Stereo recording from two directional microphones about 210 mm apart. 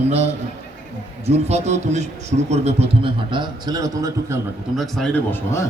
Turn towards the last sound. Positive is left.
turn(degrees=10)  # may be behind; listen again after turning